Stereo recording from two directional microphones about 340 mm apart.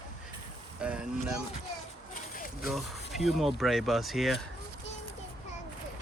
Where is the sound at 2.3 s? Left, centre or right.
Left.